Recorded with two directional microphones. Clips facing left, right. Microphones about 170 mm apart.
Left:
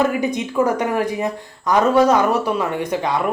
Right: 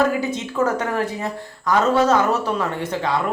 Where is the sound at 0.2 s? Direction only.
15° left (ahead or behind).